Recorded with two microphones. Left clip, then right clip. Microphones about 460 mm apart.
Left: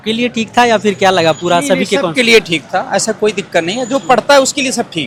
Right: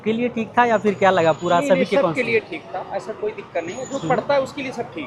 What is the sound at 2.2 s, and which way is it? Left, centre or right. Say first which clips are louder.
Speech: left 12 dB; left.